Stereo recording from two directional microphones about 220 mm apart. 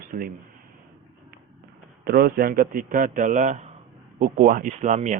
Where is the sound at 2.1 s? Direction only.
40° right (ahead or behind).